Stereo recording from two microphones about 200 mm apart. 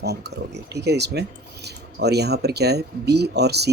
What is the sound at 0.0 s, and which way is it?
Speech, 55° right (ahead or behind).